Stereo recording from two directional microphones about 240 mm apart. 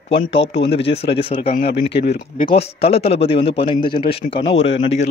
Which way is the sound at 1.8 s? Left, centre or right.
Left.